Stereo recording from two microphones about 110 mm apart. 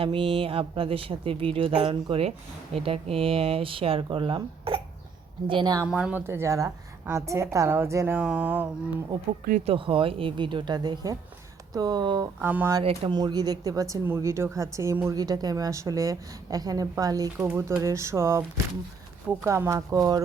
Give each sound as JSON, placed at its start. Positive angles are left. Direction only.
{"t": 0.0, "sound": "speech", "side_deg": -55}
{"t": 5.9, "sound": "a sound", "side_deg": -5}
{"t": 6.1, "sound": "a woman's voice", "side_deg": -20}
{"t": 8.2, "sound": "a sound", "side_deg": -10}
{"t": 9.6, "sound": "a woman's voice", "side_deg": -50}
{"t": 12.4, "sound": "a sound", "side_deg": -15}
{"t": 12.8, "sound": "speech", "side_deg": -60}
{"t": 13.1, "sound": "a woman's voice", "side_deg": -40}
{"t": 15.2, "sound": "a woman's voice", "side_deg": -35}
{"t": 17.4, "sound": "a woman's voice", "side_deg": -20}
{"t": 19.5, "sound": "a woman's voice", "side_deg": -30}